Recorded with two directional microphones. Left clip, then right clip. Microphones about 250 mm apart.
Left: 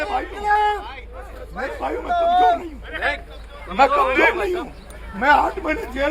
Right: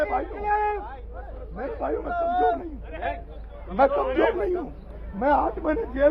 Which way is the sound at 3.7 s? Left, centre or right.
Centre.